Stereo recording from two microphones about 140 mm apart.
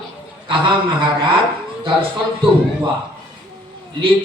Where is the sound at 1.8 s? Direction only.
40° right (ahead or behind).